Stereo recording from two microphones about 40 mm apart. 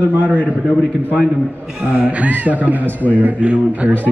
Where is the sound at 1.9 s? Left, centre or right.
Right.